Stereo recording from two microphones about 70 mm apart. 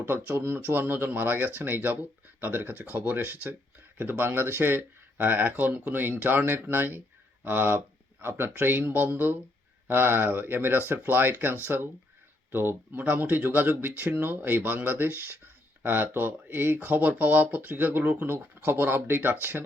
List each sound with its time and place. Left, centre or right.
0.0 s speech: right